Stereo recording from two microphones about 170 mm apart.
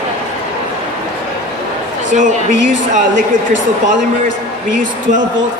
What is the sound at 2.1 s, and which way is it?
Speech, 50° right (ahead or behind).